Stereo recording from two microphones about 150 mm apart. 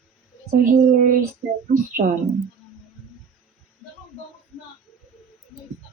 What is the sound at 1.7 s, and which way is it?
Speech, 75° right (ahead or behind).